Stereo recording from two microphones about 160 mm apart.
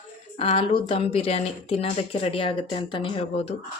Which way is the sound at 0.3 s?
35° left (ahead or behind).